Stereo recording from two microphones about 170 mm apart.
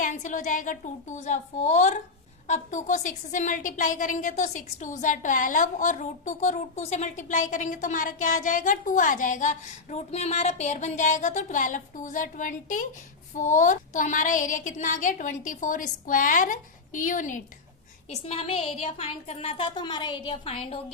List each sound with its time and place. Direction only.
0.0 s a woman's voice: 45° left (ahead or behind)
18.1 s speech: 35° left (ahead or behind)